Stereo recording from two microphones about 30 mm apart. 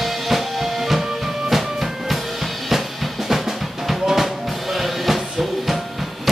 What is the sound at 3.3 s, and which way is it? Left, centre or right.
Music, centre.